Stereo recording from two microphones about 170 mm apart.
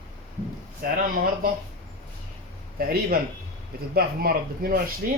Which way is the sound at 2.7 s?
60° right (ahead or behind).